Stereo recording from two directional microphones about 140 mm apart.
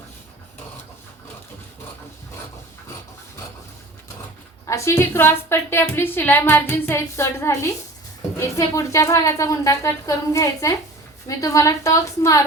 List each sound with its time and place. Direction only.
4.6 s a woman's voice: 20° left (ahead or behind)